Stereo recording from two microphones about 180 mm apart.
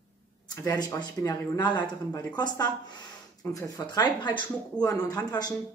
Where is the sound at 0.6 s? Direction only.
15° left (ahead or behind).